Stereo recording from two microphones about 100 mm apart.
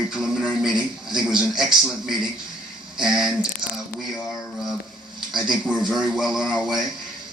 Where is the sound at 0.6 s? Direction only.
5° right (ahead or behind).